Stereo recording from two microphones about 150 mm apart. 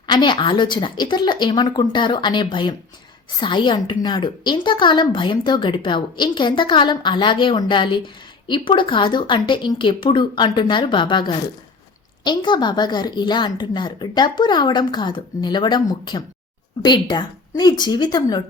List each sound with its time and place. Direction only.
0.1 s a woman's voice: 30° left (ahead or behind)